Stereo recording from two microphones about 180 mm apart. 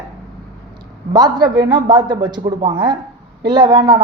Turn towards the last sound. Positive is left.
turn(degrees=-25)  # may be behind; listen again after turning